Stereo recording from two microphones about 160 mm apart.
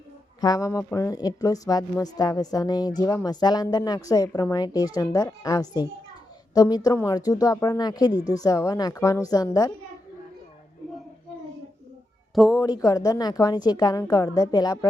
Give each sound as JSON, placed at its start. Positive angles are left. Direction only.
{"t": 0.4, "sound": "a woman's voice", "side_deg": 20}
{"t": 12.3, "sound": "speech", "side_deg": 0}
{"t": 12.5, "sound": "a woman's voice", "side_deg": 20}